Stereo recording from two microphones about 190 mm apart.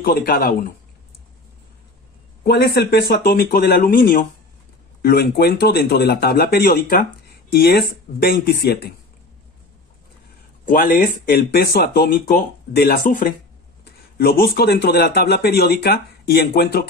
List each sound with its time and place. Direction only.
0.0 s speech: 55° left (ahead or behind)
2.4 s speech: 55° left (ahead or behind)
10.6 s speech: 50° left (ahead or behind)